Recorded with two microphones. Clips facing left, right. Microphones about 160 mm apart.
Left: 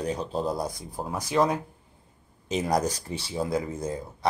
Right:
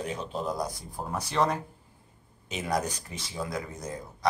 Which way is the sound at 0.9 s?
10° left (ahead or behind).